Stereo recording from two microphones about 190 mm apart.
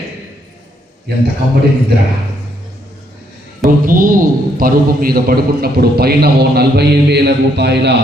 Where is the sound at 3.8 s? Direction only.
45° right (ahead or behind).